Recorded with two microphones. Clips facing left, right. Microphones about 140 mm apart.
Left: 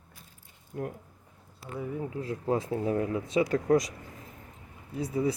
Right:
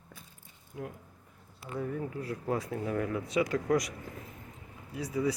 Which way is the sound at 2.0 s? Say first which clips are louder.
Left 2 dB; 20° left (ahead or behind).